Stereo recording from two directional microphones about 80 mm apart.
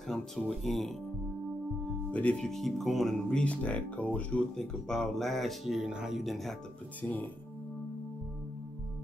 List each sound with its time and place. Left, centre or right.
0.1 s speech: centre
1.9 s speech: centre
4.6 s speech: centre
7.0 s speech: left